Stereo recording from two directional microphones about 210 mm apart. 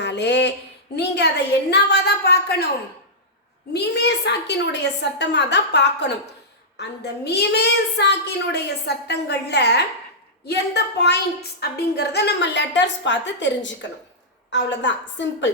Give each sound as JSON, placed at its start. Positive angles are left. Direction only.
{"t": 0.0, "sound": "a sound", "side_deg": 55}
{"t": 0.9, "sound": "a woman's voice", "side_deg": 55}
{"t": 3.7, "sound": "a woman's voice", "side_deg": 50}